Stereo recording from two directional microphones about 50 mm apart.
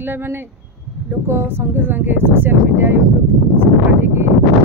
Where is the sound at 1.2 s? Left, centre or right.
Right.